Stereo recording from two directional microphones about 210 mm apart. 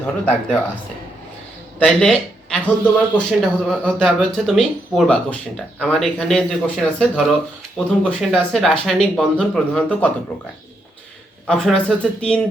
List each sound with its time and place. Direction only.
0.0 s speech: 5° left (ahead or behind)
1.8 s speech: 5° left (ahead or behind)
11.4 s speech: 5° left (ahead or behind)